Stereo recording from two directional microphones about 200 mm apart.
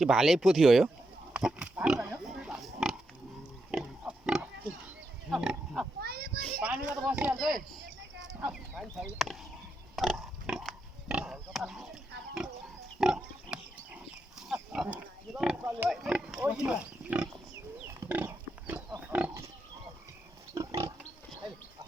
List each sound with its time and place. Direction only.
0.0 s speech: centre (ahead or behind)
1.3 s pig: 5° right (ahead or behind)
5.3 s livestock: centre (ahead or behind)
6.0 s children playing: 50° right (ahead or behind)
6.4 s a child's voice: 5° right (ahead or behind)
9.9 s pig: centre (ahead or behind)
13.0 s pig: 5° right (ahead or behind)
20.5 s pig: 15° right (ahead or behind)